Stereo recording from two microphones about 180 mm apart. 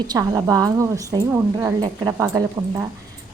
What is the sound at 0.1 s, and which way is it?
A woman's voice, 15° right (ahead or behind).